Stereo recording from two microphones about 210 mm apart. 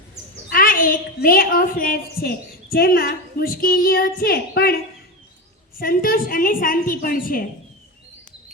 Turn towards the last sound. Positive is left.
turn(degrees=40)  # may be behind; listen again after turning